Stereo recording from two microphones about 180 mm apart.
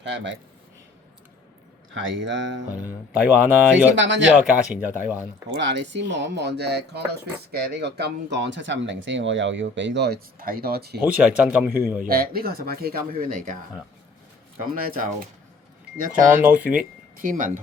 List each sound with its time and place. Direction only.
0.0 s speech: 80° right
1.9 s speech: 90° right
3.1 s speech: 10° right (ahead or behind)
3.9 s speech: 90° right
4.4 s speech: 10° right (ahead or behind)
5.5 s speech: 80° right; by 11.0 s 60° right (ahead or behind)
11.2 s speech: 5° right (ahead or behind)
12.0 s speech: 55° right (ahead or behind)
14.6 s speech: 50° right (ahead or behind)
16.4 s speech: 10° right (ahead or behind)
16.7 s speech: 50° right (ahead or behind)